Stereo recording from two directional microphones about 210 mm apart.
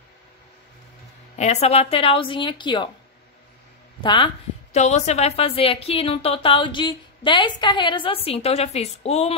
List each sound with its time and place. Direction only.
1.4 s a woman's voice: 30° left (ahead or behind)
4.0 s a woman's voice: 25° left (ahead or behind)